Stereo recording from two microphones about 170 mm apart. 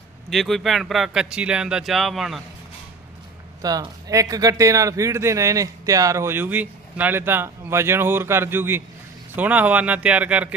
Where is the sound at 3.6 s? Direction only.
20° right (ahead or behind).